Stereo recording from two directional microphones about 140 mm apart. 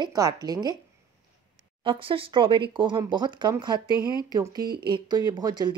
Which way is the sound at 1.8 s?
35° right (ahead or behind).